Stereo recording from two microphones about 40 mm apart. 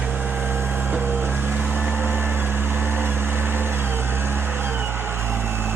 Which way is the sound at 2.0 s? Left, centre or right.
Right.